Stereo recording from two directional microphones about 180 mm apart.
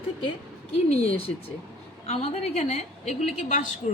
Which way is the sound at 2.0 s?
35° left (ahead or behind).